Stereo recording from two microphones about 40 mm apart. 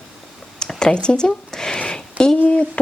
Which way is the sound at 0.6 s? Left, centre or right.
Centre.